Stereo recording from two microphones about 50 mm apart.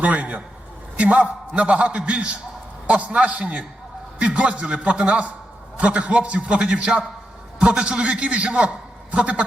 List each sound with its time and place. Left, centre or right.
0.0 s a man's voice: right